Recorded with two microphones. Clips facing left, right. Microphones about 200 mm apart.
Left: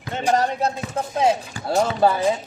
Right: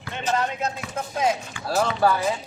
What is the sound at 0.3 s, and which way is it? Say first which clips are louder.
Speech: left 3 dB; 35° left (ahead or behind).